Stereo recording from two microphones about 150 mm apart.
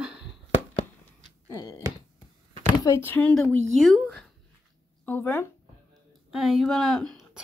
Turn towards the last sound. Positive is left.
turn(degrees=0)  # may be behind; listen again after turning